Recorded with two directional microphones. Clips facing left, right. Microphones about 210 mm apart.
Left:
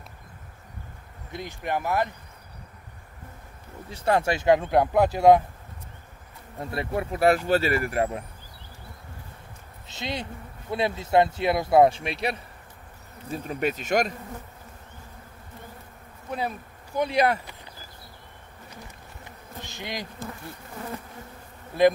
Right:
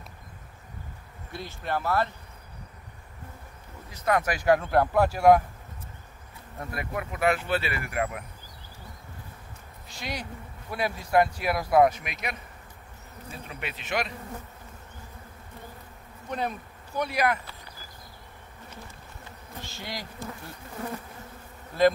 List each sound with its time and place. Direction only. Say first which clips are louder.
1.3 s speech: left 2 dB; 15° left (ahead or behind)
3.9 s speech: left 3 dB; 30° left (ahead or behind)
6.6 s speech: left 5 dB; 30° left (ahead or behind)
9.8 s speech: left 3 dB; 25° left (ahead or behind)
13.3 s speech: left 11 dB; 40° left (ahead or behind)
16.3 s insect: left 1 dB; 5° left (ahead or behind)
17.0 s speech: left 4 dB; 25° left (ahead or behind)
19.6 s bee: left 3 dB; 20° left (ahead or behind)